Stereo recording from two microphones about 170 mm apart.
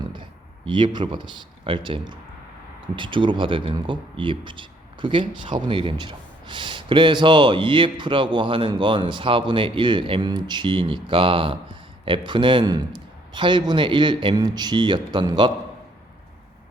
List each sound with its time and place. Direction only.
0.1 s a man's voice: 30° right (ahead or behind)